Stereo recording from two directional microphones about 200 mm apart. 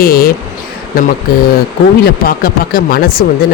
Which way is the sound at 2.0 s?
50° left (ahead or behind).